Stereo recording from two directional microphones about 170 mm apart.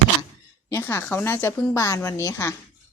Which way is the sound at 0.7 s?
15° left (ahead or behind).